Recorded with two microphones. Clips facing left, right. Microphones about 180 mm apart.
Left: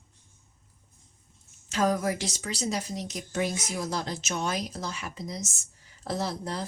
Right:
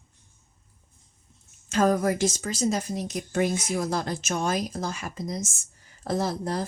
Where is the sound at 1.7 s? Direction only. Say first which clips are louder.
Right 4 dB; 50° right (ahead or behind).